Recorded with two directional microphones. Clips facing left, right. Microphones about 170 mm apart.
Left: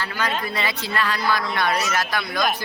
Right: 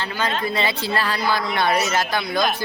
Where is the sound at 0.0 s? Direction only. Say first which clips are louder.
Right 2 dB; 25° right (ahead or behind).